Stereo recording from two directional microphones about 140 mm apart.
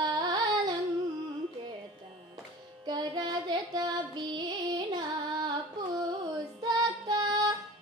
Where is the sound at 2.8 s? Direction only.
30° right (ahead or behind).